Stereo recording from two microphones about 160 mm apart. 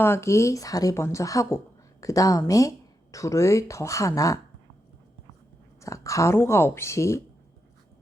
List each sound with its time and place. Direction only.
0.0 s a woman's voice: 15° left (ahead or behind)
5.8 s speech: 20° left (ahead or behind)